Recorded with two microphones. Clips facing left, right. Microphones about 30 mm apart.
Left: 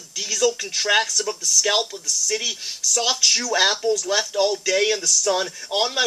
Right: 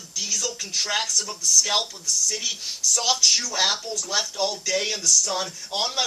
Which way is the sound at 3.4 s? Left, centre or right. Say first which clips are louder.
Left 5 dB; left.